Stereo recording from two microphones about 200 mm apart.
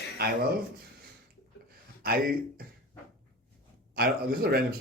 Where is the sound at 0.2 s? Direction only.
50° right (ahead or behind).